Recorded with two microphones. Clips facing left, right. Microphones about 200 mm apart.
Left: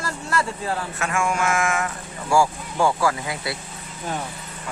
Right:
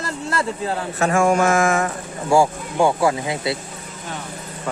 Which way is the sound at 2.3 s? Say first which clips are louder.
Right 3 dB; 20° right (ahead or behind).